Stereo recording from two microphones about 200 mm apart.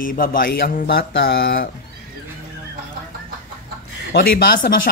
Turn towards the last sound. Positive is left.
turn(degrees=45)  # may be behind; listen again after turning